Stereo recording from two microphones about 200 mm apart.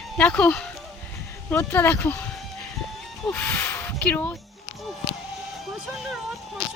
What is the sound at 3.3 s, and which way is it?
Speech, 5° left (ahead or behind).